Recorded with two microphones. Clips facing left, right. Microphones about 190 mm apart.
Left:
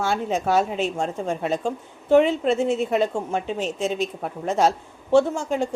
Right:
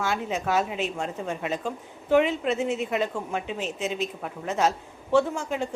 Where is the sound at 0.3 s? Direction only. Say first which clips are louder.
Left 4 dB; 45° left (ahead or behind).